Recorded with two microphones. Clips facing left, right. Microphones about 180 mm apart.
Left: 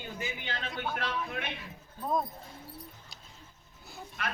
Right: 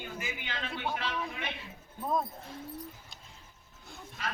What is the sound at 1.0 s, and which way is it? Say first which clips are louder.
Speech: left 1 dB; 55° left (ahead or behind).